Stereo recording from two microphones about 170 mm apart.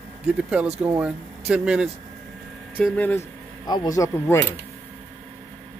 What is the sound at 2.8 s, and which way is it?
Speech, 5° left (ahead or behind).